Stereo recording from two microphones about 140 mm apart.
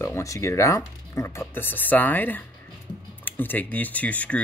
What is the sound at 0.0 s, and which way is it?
Speech, 20° left (ahead or behind).